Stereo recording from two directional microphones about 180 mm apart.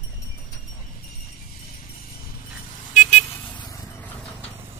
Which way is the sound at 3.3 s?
10° left (ahead or behind).